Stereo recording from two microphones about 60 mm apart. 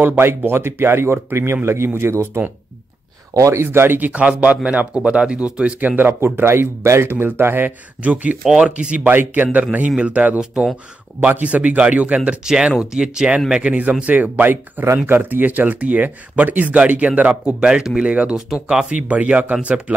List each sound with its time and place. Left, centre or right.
0.0 s speech: right
3.3 s speech: right
3.6 s speech: right
4.1 s speech: right
8.0 s speech: right
10.4 s speech: centre
11.1 s speech: right
12.4 s speech: centre